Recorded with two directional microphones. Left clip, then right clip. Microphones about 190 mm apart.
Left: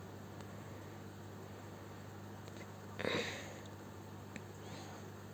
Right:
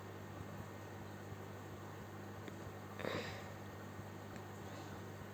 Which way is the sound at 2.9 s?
40° left (ahead or behind).